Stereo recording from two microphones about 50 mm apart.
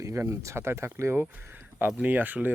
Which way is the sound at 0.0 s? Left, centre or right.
Right.